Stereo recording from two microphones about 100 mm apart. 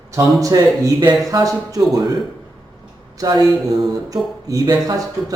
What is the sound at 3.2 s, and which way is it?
Speech, 40° right (ahead or behind).